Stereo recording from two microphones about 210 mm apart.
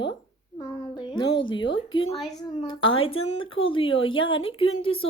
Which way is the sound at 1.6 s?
65° left (ahead or behind).